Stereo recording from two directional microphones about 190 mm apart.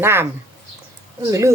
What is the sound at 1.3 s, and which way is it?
Speech, 15° right (ahead or behind).